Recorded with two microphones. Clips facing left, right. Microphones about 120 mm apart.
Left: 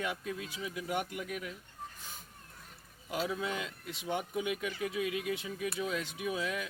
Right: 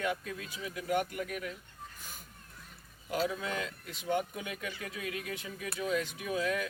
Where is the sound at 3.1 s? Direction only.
15° left (ahead or behind).